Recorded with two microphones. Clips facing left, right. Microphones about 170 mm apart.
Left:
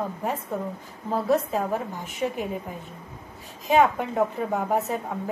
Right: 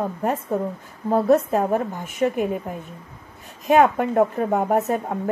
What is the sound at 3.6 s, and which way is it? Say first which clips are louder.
A woman's voice: right 4 dB; 55° right (ahead or behind).